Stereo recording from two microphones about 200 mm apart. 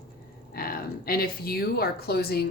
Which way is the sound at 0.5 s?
50° left (ahead or behind).